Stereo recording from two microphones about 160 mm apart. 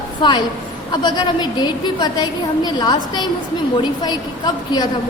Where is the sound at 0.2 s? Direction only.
30° left (ahead or behind).